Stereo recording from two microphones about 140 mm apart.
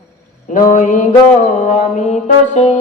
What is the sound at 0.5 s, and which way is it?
Speech, 70° left (ahead or behind).